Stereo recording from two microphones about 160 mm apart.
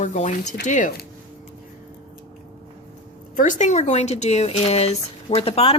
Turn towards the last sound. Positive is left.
turn(degrees=40)  # may be behind; listen again after turning